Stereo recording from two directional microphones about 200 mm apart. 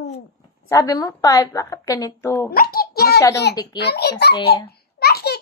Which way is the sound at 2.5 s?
50° left (ahead or behind).